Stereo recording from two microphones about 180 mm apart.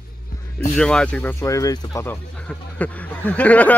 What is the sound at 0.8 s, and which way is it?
Speech, 5° left (ahead or behind).